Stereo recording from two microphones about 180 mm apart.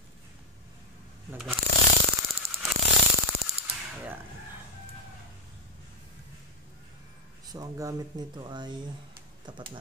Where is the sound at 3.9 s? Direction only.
10° right (ahead or behind).